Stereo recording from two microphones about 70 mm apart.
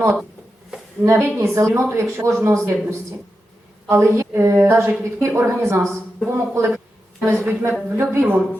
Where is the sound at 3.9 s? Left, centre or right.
Right.